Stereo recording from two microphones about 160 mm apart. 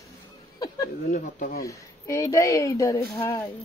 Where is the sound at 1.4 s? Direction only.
65° left (ahead or behind).